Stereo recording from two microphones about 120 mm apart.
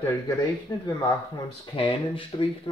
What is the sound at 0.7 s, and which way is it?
Speech, 20° left (ahead or behind).